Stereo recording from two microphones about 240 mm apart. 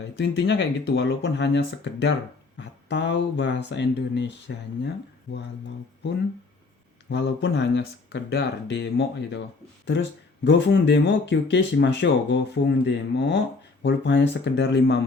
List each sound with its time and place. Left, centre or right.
0.2 s speech: left
7.1 s speech: left